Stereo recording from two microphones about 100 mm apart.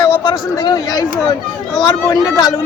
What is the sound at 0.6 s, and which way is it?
Speech, 45° left (ahead or behind).